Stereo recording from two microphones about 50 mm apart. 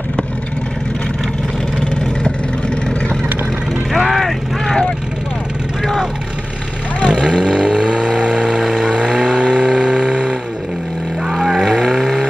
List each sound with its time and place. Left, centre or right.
3.9 s vehicle: centre
7.1 s vehicle: centre
8.2 s a sound: centre
8.5 s vehicle: centre
11.3 s vehicle: centre